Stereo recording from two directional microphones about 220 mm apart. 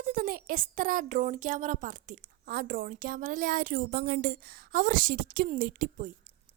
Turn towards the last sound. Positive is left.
turn(degrees=-35)  # may be behind; listen again after turning